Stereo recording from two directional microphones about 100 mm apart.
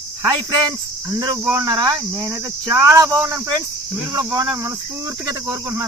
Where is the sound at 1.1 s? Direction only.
40° right (ahead or behind).